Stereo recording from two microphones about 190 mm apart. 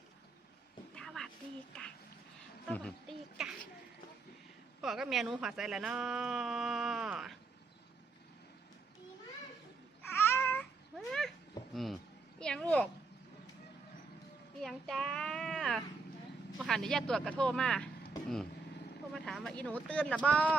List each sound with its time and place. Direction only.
0.9 s a sound: 5° left (ahead or behind)
2.6 s a sound: 5° left (ahead or behind)
4.8 s speech: centre (ahead or behind)
10.0 s cat: 10° left (ahead or behind)
11.7 s speech: centre (ahead or behind)
14.6 s a child's voice: centre (ahead or behind)
19.1 s speech: centre (ahead or behind)